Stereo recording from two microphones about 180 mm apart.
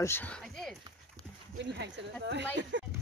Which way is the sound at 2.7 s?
90° right.